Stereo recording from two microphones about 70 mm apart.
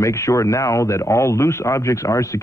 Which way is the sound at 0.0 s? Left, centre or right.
Left.